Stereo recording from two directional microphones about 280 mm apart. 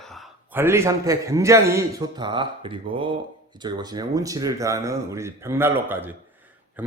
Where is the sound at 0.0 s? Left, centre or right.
Centre.